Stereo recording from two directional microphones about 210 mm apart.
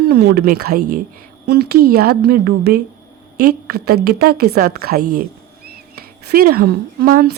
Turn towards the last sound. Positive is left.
turn(degrees=-45)  # may be behind; listen again after turning